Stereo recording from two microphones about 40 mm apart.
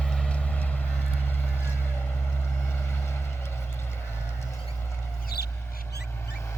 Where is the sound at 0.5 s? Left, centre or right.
Left.